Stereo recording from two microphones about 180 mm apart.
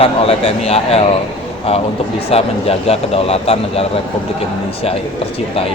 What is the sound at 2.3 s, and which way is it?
Speech, 35° left (ahead or behind).